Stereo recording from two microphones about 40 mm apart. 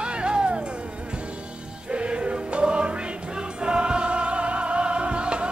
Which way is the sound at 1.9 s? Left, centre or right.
Right.